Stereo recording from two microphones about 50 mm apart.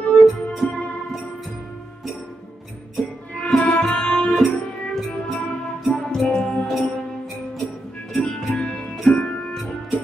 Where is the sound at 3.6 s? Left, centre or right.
Left.